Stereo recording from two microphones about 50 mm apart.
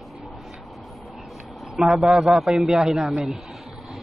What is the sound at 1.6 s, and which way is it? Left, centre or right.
A man's voice, centre.